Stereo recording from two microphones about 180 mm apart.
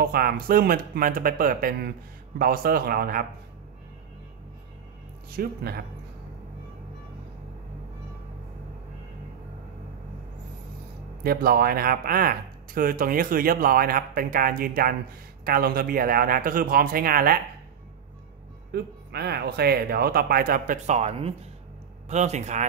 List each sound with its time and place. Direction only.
0.0 s speech: 55° right (ahead or behind)
5.3 s speech: 60° right (ahead or behind)
11.2 s speech: 55° right (ahead or behind)
18.7 s speech: 65° right (ahead or behind); by 22.7 s 40° right (ahead or behind)